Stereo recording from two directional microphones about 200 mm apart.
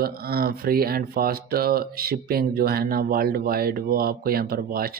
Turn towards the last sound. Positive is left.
turn(degrees=-45)  # may be behind; listen again after turning